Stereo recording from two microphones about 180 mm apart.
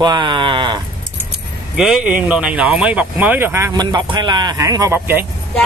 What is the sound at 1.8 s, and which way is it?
Speech, 5° right (ahead or behind).